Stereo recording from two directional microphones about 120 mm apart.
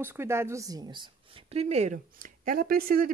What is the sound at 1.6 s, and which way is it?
Speech, 65° right (ahead or behind).